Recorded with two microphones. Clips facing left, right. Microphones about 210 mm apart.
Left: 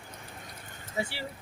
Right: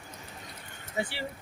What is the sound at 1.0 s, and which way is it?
Speech, 5° left (ahead or behind).